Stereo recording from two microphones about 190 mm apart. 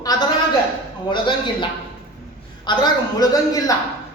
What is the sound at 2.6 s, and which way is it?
A man's voice, 20° left (ahead or behind).